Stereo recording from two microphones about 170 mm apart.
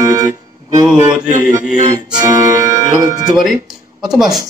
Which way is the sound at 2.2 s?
20° right (ahead or behind).